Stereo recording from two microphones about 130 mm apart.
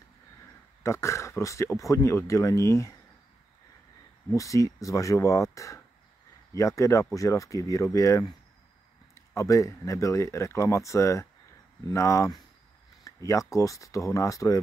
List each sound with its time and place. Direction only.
0.8 s speech: 20° left (ahead or behind)
4.3 s speech: 25° left (ahead or behind)